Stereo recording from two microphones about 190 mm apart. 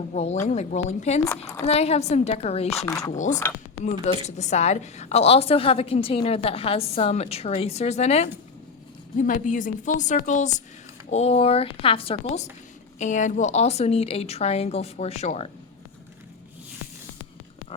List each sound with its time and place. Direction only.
0.1 s a woman's voice: 35° left (ahead or behind)
2.8 s speech: 20° left (ahead or behind)
4.0 s a woman's voice: 35° left (ahead or behind)